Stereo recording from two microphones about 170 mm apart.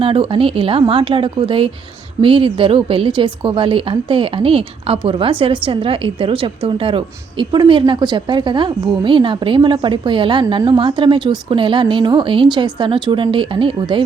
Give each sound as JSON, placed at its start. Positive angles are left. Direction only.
{"t": 0.0, "sound": "a woman's voice", "side_deg": -30}